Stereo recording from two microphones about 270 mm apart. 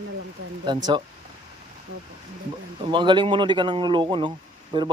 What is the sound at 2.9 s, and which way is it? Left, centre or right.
Speech, centre.